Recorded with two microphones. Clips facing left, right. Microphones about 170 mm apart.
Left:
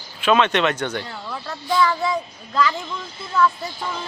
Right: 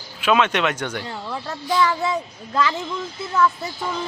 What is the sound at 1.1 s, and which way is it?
Speech, 20° right (ahead or behind).